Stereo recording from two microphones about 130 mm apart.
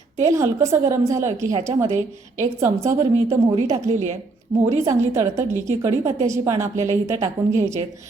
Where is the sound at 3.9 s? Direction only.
70° right (ahead or behind).